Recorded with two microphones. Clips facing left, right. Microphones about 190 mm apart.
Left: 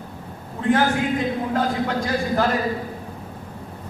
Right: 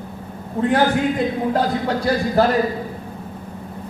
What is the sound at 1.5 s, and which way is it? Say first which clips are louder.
Speech: right 2 dB; 35° right (ahead or behind).